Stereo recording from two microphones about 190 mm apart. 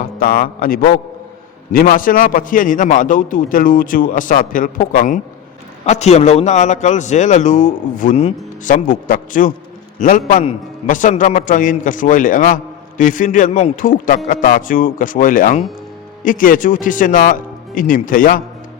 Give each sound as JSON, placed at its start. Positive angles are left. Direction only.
{"t": 0.0, "sound": "a man's voice", "side_deg": 45}